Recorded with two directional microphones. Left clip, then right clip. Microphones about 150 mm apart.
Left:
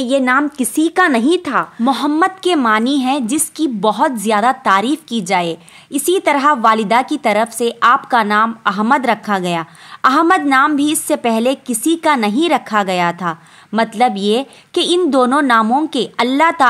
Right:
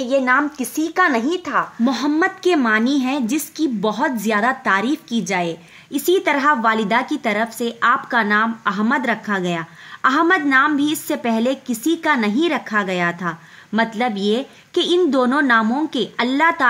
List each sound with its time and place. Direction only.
0.0 s a woman's voice: 30° left (ahead or behind)